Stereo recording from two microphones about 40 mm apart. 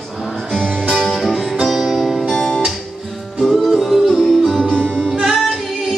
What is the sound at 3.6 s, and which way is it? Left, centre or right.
Music, centre.